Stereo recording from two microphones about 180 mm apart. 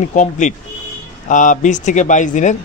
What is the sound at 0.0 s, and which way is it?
Speech, 45° left (ahead or behind).